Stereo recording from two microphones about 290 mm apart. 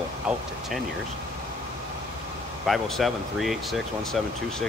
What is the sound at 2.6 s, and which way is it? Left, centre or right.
Speech, centre.